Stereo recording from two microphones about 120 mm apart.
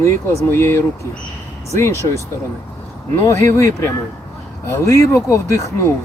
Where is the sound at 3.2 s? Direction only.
20° left (ahead or behind).